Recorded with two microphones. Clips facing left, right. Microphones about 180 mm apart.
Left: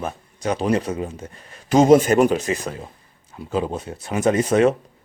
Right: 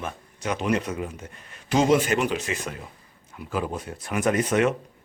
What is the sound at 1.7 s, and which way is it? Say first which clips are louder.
A man's voice: left 7 dB; 45° left (ahead or behind).